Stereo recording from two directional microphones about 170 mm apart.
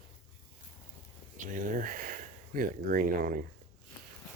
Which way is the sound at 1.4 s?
50° right (ahead or behind).